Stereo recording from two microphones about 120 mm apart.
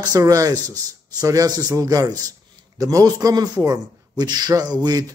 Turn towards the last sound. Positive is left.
turn(degrees=-35)  # may be behind; listen again after turning